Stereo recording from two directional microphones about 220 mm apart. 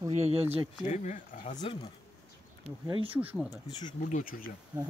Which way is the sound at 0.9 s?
35° left (ahead or behind).